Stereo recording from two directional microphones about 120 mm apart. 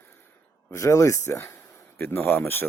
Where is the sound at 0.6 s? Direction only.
25° left (ahead or behind).